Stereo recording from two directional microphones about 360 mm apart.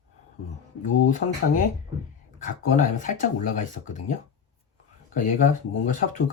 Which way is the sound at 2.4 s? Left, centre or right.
Left.